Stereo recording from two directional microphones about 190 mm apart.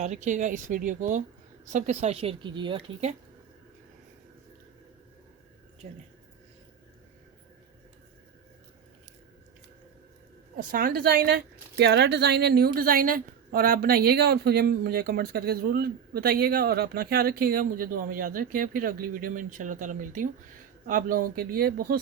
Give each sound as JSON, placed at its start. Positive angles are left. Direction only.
{"t": 0.0, "sound": "a woman's voice", "side_deg": -40}
{"t": 10.7, "sound": "speech", "side_deg": -50}